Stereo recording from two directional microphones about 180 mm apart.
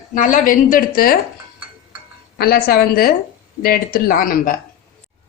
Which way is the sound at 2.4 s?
55° left (ahead or behind).